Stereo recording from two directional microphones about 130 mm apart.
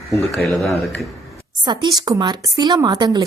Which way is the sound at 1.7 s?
35° right (ahead or behind).